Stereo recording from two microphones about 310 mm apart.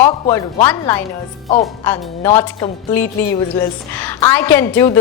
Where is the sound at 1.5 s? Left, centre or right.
Centre.